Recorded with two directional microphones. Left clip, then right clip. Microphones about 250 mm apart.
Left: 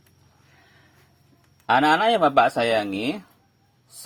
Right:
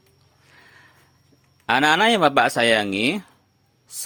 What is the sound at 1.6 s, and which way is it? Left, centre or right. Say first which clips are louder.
Speech: right 1 dB; right.